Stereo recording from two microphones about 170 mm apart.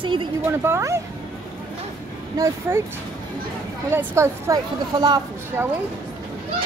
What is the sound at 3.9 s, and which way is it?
A woman's voice, 15° right (ahead or behind).